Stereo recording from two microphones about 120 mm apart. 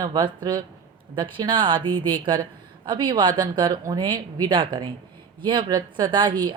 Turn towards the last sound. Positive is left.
turn(degrees=-40)  # may be behind; listen again after turning